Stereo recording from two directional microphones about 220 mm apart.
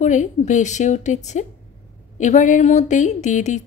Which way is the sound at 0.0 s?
35° left (ahead or behind).